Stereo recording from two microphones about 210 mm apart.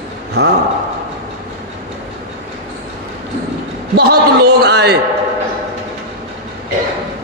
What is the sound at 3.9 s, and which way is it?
A man's voice, 50° right (ahead or behind).